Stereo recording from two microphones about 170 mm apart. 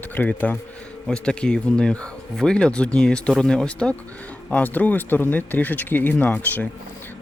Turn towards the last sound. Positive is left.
turn(degrees=10)  # may be behind; listen again after turning